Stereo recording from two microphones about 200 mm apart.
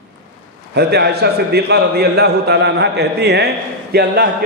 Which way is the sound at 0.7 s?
55° right (ahead or behind).